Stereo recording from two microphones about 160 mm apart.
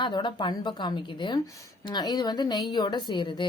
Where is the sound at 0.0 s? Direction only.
30° left (ahead or behind).